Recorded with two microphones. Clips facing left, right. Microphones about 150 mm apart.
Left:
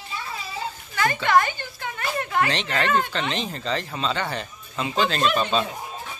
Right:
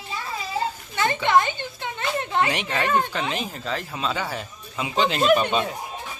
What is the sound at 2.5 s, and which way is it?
Speech, 10° right (ahead or behind).